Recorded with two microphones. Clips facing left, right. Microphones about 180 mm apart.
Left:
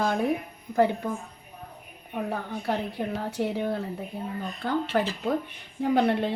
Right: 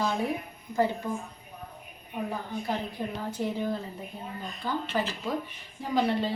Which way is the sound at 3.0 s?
65° left (ahead or behind).